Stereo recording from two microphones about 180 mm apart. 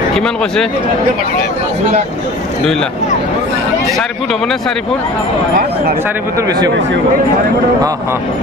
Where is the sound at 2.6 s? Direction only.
5° left (ahead or behind).